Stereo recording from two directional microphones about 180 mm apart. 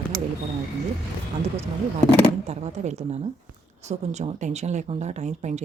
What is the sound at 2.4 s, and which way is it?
Speech, 40° right (ahead or behind).